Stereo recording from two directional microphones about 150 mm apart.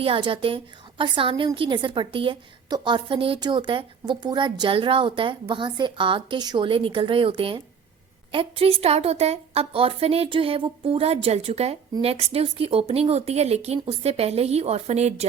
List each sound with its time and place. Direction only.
0.0 s a woman's voice: 35° right (ahead or behind)